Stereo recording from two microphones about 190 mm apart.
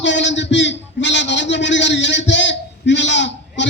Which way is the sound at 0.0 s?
70° left (ahead or behind).